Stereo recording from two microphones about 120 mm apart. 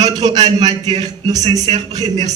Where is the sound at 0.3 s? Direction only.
35° right (ahead or behind).